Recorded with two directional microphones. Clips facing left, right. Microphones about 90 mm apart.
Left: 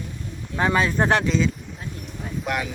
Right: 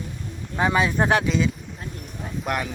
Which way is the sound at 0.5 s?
10° right (ahead or behind).